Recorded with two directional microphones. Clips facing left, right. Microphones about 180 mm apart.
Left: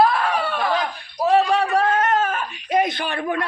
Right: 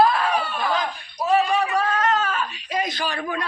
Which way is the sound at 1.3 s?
65° left (ahead or behind).